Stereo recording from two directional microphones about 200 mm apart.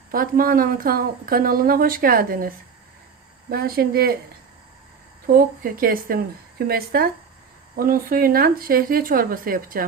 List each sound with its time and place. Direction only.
0.1 s a woman's voice: 45° right (ahead or behind)
3.5 s a woman's voice: 50° right (ahead or behind)
5.2 s a woman's voice: 45° right (ahead or behind)